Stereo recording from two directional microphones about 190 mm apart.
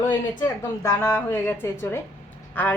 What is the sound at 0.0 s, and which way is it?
A woman's voice, 10° left (ahead or behind).